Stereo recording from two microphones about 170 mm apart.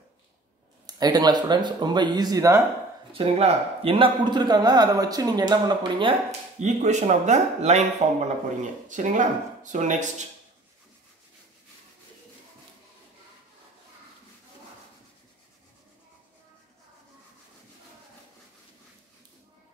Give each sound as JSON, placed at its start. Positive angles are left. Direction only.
{"t": 0.8, "sound": "a man's voice", "side_deg": -25}
{"t": 3.1, "sound": "a man's voice", "side_deg": -35}
{"t": 6.6, "sound": "speech", "side_deg": -45}